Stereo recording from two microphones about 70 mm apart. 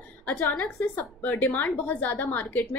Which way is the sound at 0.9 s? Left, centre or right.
Left.